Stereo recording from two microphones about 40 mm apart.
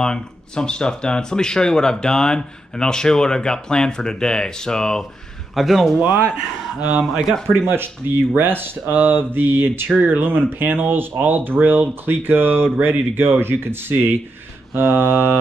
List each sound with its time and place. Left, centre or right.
0.0 s speech: left
5.5 s speech: centre
6.8 s speech: right
7.7 s speech: right